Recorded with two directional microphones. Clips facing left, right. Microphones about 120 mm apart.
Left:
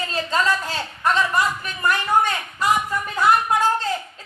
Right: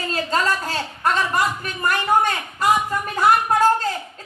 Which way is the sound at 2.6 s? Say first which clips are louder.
Right 2 dB; 15° right (ahead or behind).